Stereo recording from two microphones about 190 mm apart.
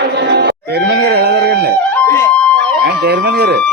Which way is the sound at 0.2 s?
65° right (ahead or behind).